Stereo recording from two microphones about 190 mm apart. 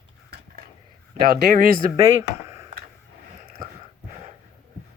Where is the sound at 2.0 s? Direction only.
15° right (ahead or behind).